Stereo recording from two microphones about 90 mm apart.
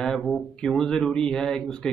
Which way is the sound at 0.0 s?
10° left (ahead or behind).